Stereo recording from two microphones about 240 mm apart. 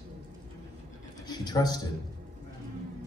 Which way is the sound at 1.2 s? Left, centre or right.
Centre.